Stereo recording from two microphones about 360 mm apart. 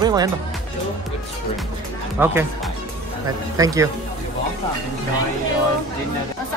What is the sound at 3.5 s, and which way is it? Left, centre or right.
Speech, centre.